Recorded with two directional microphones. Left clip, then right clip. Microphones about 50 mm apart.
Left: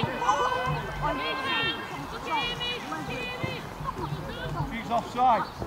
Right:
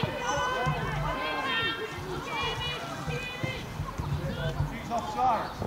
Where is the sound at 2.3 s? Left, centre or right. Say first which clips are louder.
Left 4 dB; centre.